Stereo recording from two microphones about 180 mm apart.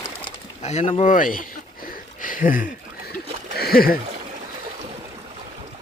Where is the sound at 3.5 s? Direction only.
60° left (ahead or behind).